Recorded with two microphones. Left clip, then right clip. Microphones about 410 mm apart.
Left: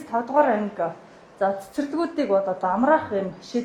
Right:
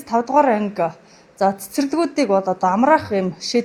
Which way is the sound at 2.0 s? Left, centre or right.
Right.